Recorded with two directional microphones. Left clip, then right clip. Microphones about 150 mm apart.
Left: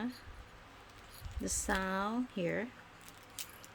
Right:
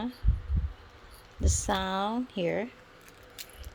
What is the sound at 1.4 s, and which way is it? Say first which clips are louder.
Speech: right 5 dB; 20° right (ahead or behind).